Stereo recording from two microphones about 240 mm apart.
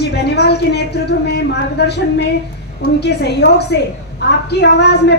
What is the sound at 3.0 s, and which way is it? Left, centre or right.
A woman's voice, left.